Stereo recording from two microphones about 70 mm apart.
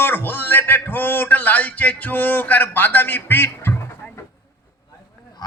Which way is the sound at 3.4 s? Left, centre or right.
Left.